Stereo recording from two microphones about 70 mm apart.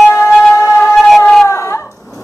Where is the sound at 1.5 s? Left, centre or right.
Left.